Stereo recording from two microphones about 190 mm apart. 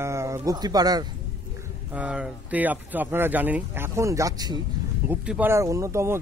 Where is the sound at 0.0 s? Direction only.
15° right (ahead or behind).